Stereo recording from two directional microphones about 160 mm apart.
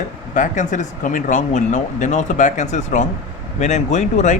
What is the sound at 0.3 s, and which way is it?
Speech, 50° left (ahead or behind).